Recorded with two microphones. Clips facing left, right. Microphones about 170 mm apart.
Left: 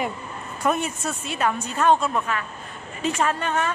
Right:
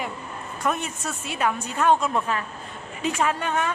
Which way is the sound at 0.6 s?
5° left (ahead or behind).